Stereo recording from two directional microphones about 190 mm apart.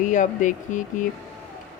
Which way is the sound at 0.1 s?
40° left (ahead or behind).